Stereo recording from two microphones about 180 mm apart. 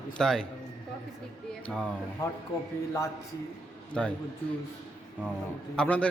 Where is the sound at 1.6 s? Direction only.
5° left (ahead or behind).